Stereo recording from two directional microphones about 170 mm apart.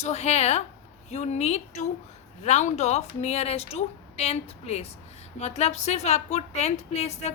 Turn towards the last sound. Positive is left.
turn(degrees=40)  # may be behind; listen again after turning